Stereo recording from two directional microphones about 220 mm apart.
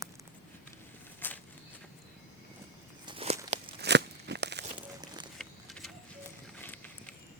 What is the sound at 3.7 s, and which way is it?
Crunch, 50° right (ahead or behind).